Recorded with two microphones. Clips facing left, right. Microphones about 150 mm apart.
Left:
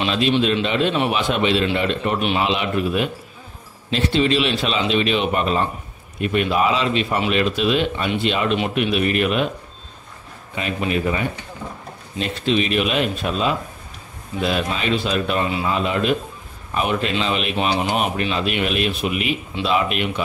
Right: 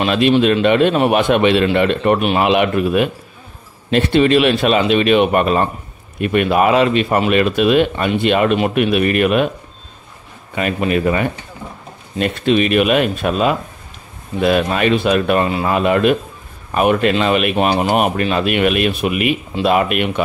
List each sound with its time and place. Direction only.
0.0 s speech: 55° right (ahead or behind)
10.5 s speech: 55° right (ahead or behind)